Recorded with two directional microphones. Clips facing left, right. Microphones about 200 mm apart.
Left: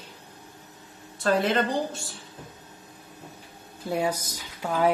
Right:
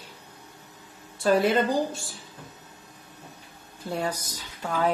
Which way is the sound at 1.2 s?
5° right (ahead or behind).